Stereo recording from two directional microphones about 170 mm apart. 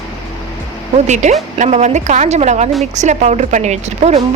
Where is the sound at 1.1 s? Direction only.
45° right (ahead or behind).